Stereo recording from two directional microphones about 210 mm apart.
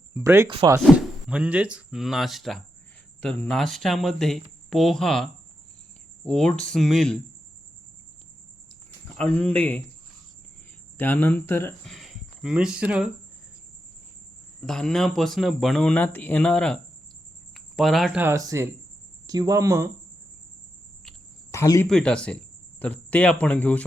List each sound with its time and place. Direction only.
0.1 s speech: 10° right (ahead or behind)
0.9 s speech: 5° right (ahead or behind)
9.1 s a man's voice: 5° left (ahead or behind)
10.9 s a man's voice: 10° left (ahead or behind)
11.9 s speech: centre (ahead or behind)
14.6 s speech: centre (ahead or behind); by 19.9 s 15° right (ahead or behind)
21.5 s speech: 15° left (ahead or behind)
21.8 s a man's voice: 5° left (ahead or behind)